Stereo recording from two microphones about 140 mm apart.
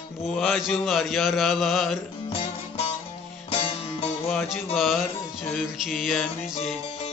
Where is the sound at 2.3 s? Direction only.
45° left (ahead or behind).